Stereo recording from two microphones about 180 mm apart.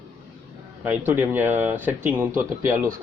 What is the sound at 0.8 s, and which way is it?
Speech, 10° right (ahead or behind).